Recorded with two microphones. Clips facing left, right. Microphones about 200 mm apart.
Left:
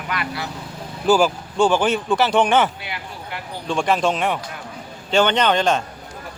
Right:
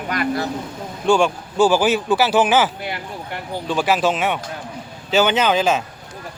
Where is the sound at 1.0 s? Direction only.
5° left (ahead or behind).